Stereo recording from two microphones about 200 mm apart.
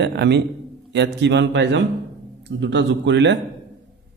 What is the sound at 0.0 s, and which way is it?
A man's voice, 60° right (ahead or behind).